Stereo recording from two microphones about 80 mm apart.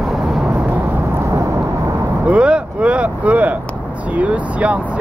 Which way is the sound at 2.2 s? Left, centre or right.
Centre.